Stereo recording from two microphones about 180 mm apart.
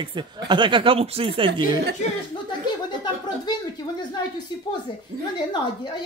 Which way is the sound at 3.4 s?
25° left (ahead or behind).